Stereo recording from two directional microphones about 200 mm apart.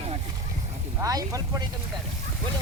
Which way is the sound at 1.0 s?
15° right (ahead or behind).